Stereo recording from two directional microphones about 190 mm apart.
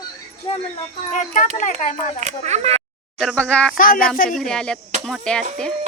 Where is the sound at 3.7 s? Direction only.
45° left (ahead or behind).